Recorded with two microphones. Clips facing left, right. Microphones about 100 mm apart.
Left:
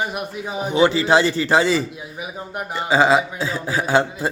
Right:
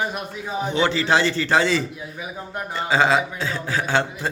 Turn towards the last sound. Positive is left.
turn(degrees=10)  # may be behind; listen again after turning